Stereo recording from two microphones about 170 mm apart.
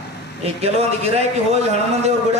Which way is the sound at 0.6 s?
35° right (ahead or behind).